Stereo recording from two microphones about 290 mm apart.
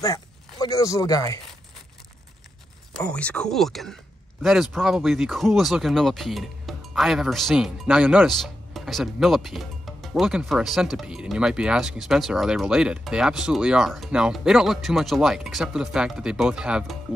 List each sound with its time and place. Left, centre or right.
0.0 s speech: centre
2.9 s speech: centre